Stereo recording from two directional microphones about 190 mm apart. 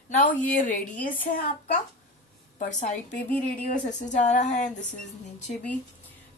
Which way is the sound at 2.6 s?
40° left (ahead or behind).